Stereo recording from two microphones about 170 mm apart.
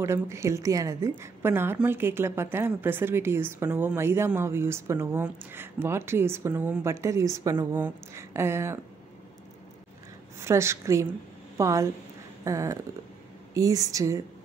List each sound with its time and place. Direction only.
0.0 s a woman's voice: 15° right (ahead or behind)
10.4 s a woman's voice: 15° right (ahead or behind)